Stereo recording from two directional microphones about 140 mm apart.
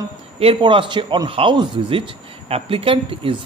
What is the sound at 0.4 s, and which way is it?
A man's voice, 40° right (ahead or behind).